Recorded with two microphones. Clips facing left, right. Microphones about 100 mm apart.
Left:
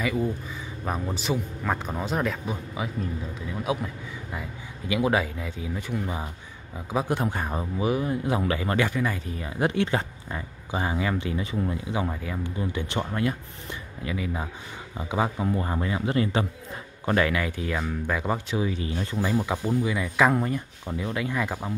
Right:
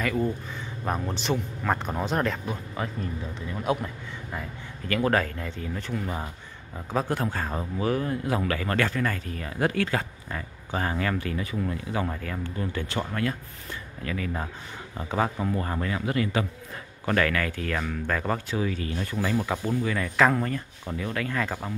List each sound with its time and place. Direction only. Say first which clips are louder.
0.0 s a man's voice: even; 5° left (ahead or behind)